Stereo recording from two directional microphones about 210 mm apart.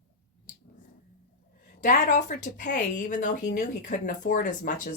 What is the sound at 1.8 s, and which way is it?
Speech, 35° left (ahead or behind).